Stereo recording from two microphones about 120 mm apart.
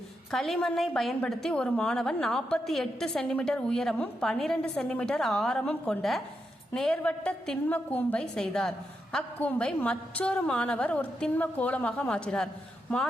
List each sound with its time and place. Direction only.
0.3 s a woman's voice: centre (ahead or behind)